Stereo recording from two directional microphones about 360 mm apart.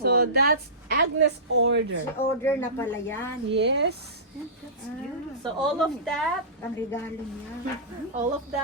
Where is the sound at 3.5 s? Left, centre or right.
Right.